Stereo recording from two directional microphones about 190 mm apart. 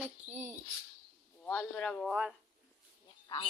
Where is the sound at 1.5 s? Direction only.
10° left (ahead or behind).